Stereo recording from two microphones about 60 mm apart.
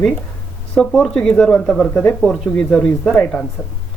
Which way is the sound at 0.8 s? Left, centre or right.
Centre.